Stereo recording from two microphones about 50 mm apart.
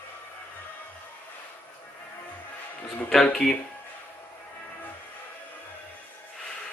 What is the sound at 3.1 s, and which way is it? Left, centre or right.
Speech, centre.